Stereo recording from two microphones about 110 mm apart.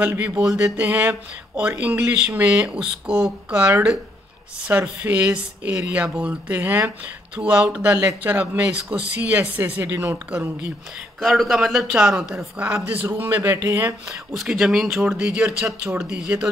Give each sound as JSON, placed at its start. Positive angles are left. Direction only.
{"t": 0.0, "sound": "a man's voice", "side_deg": -20}
{"t": 0.4, "sound": "a man's voice", "side_deg": -5}
{"t": 11.1, "sound": "a man's voice", "side_deg": 0}
{"t": 14.3, "sound": "speech", "side_deg": -5}